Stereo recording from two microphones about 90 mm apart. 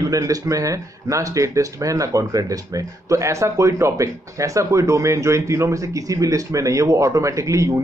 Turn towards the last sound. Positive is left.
turn(degrees=-35)  # may be behind; listen again after turning